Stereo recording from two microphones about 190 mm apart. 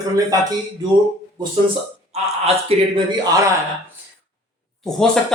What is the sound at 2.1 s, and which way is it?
Speech, 35° right (ahead or behind).